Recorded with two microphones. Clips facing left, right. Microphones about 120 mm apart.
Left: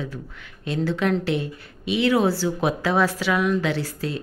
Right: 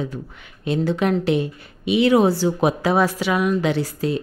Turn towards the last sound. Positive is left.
turn(degrees=-15)  # may be behind; listen again after turning